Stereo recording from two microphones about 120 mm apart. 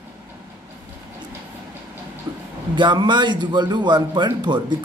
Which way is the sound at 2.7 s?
40° right (ahead or behind).